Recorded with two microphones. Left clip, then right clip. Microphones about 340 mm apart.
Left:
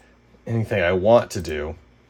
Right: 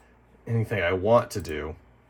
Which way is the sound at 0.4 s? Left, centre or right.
Left.